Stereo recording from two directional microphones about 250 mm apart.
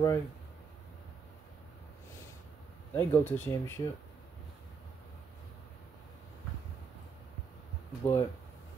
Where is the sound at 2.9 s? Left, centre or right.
Centre.